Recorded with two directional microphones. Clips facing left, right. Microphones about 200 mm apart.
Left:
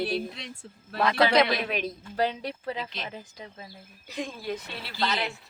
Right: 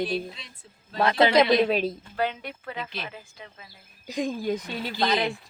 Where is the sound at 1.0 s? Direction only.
20° right (ahead or behind).